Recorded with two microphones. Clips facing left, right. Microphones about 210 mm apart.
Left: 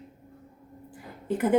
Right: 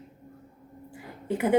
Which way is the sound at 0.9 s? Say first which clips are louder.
Left 1 dB; 10° right (ahead or behind).